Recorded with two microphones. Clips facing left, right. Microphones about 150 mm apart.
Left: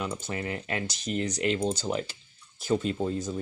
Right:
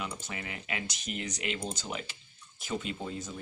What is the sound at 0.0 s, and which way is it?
Speech, 40° left (ahead or behind).